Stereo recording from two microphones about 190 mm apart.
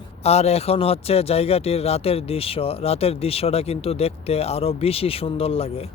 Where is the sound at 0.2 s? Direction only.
35° left (ahead or behind).